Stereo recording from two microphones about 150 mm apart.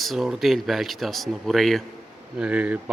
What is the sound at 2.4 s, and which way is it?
Speech, 10° right (ahead or behind).